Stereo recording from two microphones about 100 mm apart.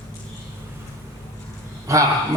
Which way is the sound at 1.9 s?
35° right (ahead or behind).